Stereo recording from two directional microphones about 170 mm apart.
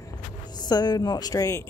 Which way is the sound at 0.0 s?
25° left (ahead or behind).